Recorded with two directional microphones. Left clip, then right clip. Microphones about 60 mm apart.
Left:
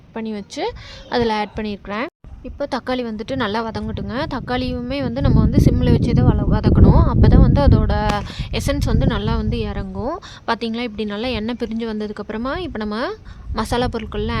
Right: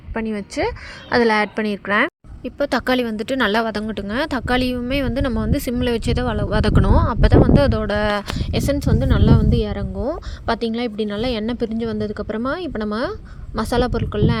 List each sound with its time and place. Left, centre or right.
0.1 s speech: right
6.1 s speech: right
6.8 s speech: right
7.3 s a woman's voice: centre
8.7 s a woman's voice: centre; by 9.8 s right
10.0 s speech: centre
11.5 s a woman's voice: centre; by 14.3 s right